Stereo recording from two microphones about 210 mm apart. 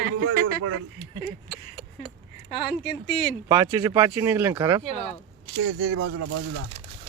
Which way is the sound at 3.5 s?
15° right (ahead or behind).